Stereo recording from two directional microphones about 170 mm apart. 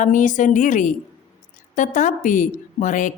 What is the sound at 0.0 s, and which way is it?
Speech, 50° left (ahead or behind).